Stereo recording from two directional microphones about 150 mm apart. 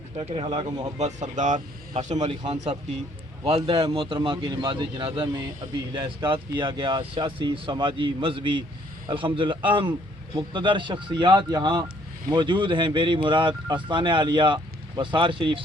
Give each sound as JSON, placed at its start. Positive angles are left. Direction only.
{"t": 0.2, "sound": "speech", "side_deg": -40}
{"t": 0.9, "sound": "speech", "side_deg": -50}
{"t": 3.4, "sound": "speech", "side_deg": -35}